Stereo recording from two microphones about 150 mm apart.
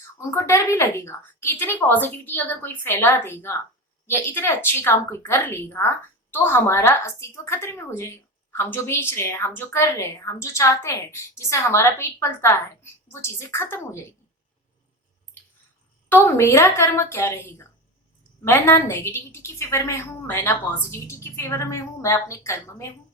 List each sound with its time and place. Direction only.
0.2 s a woman's voice: 20° left (ahead or behind)
16.0 s a woman's voice: 15° left (ahead or behind)